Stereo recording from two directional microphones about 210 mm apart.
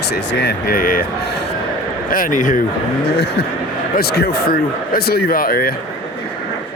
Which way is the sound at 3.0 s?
50° left (ahead or behind).